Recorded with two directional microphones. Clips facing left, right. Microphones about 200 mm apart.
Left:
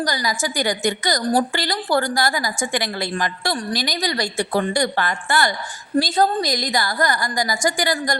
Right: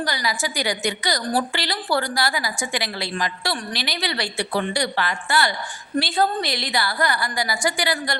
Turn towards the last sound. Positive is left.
turn(degrees=45)  # may be behind; listen again after turning